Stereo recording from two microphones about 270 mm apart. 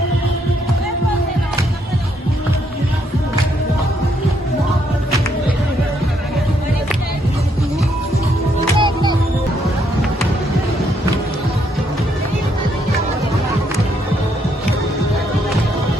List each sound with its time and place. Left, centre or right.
8.8 s music: centre